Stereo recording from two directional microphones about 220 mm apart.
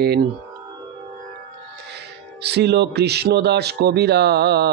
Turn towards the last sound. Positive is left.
turn(degrees=-50)  # may be behind; listen again after turning